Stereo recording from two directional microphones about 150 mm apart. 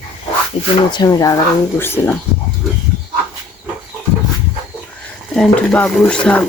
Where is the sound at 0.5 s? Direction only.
40° left (ahead or behind).